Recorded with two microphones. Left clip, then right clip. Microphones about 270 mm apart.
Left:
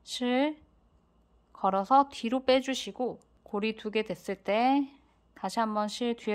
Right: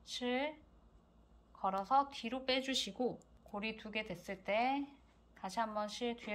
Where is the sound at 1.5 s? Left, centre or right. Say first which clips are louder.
Left 9 dB; left.